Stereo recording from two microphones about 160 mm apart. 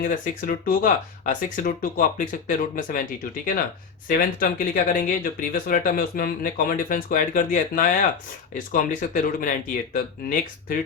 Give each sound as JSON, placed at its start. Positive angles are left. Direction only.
{"t": 0.0, "sound": "speech", "side_deg": 60}
{"t": 4.4, "sound": "speech", "side_deg": 60}